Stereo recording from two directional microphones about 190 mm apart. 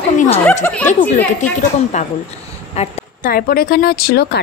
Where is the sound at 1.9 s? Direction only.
40° left (ahead or behind).